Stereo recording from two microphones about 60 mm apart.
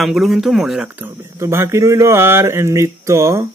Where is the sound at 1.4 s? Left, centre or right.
Right.